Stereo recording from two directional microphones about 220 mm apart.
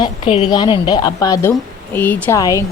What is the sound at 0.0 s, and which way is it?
A woman's voice, 25° left (ahead or behind).